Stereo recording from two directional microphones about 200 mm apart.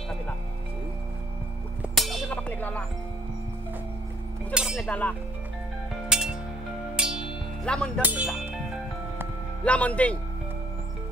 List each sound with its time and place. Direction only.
1.8 s music: centre (ahead or behind)
4.7 s speech: 5° left (ahead or behind)
6.0 s music: 5° right (ahead or behind)
8.0 s speech: 5° right (ahead or behind)
9.7 s speech: 5° left (ahead or behind)